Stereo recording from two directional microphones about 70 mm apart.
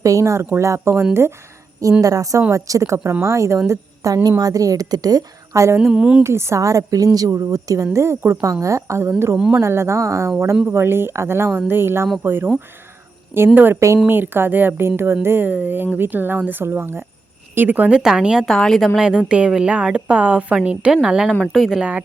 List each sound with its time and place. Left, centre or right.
0.0 s a woman's voice: right
2.0 s a woman's voice: right
3.7 s a woman's voice: right
5.5 s speech: right
5.9 s a woman's voice: centre
6.2 s a woman's voice: right
7.9 s speech: right
13.5 s speech: right
13.7 s a woman's voice: right
14.1 s speech: right
17.9 s a woman's voice: centre
18.4 s speech: centre
18.9 s a woman's voice: centre